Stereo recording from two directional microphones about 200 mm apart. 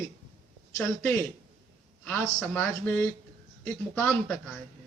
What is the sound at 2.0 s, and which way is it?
Speech, 10° left (ahead or behind).